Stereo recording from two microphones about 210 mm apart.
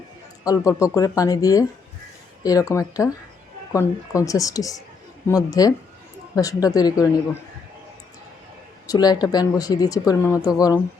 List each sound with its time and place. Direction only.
0.4 s speech: 15° left (ahead or behind)
8.9 s speech: 20° left (ahead or behind)